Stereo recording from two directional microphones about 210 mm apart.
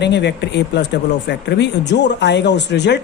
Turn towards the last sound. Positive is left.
turn(degrees=55)  # may be behind; listen again after turning